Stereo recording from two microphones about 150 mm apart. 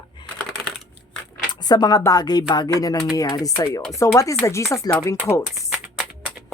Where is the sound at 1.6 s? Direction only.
25° left (ahead or behind).